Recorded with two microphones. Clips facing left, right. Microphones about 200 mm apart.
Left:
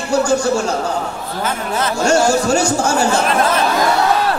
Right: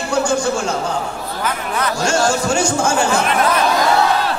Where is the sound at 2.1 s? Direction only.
40° left (ahead or behind).